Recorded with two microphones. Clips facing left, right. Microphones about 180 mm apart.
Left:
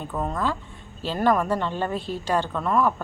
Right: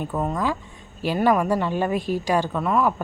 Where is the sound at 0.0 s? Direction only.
10° right (ahead or behind).